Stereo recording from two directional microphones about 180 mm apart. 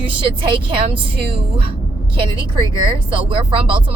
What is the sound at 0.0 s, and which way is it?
A woman's voice, 30° right (ahead or behind).